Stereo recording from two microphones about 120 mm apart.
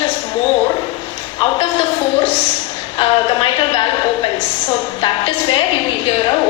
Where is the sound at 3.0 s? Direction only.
45° left (ahead or behind).